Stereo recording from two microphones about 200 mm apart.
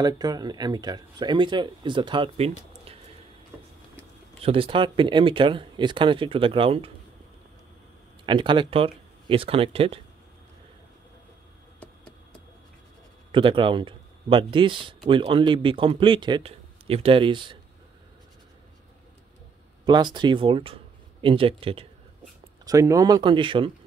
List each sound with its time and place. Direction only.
0.0 s speech: 20° right (ahead or behind)
4.4 s speech: 25° right (ahead or behind)
8.3 s speech: 25° right (ahead or behind)
13.3 s speech: 25° right (ahead or behind)
19.9 s speech: 20° right (ahead or behind)
22.7 s speech: 15° right (ahead or behind)